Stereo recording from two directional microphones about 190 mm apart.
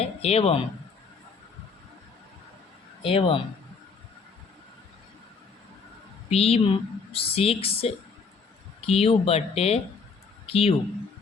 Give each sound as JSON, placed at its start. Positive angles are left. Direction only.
{"t": 0.0, "sound": "speech", "side_deg": 35}
{"t": 3.0, "sound": "speech", "side_deg": 30}
{"t": 6.3, "sound": "speech", "side_deg": 30}